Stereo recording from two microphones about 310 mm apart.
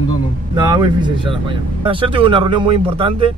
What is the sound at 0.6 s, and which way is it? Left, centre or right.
Speech, centre.